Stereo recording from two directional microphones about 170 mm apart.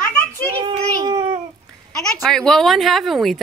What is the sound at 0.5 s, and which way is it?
Speech, 25° right (ahead or behind).